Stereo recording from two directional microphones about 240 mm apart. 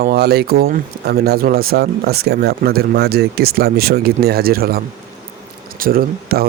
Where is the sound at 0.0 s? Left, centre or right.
Right.